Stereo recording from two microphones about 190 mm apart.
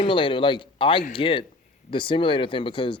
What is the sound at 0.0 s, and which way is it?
Speech, 25° left (ahead or behind).